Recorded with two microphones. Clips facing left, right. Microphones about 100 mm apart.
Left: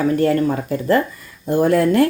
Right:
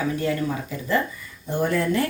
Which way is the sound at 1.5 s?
90° left.